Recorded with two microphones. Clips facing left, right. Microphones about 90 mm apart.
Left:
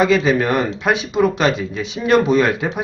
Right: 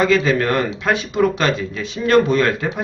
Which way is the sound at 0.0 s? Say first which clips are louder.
Left 1 dB; 15° left (ahead or behind).